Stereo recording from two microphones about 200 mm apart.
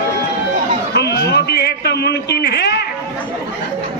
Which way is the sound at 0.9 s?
55° left (ahead or behind).